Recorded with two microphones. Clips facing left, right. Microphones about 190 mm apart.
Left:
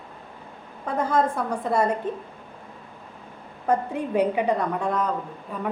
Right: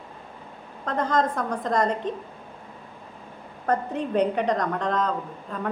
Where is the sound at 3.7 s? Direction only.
10° left (ahead or behind).